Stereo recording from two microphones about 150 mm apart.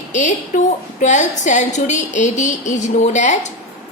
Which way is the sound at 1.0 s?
55° left (ahead or behind).